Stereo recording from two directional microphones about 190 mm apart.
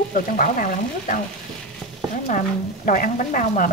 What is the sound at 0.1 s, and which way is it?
Speech, 45° left (ahead or behind).